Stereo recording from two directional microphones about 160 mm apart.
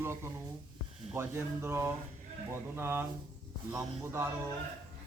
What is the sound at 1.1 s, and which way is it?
Speech, 15° right (ahead or behind).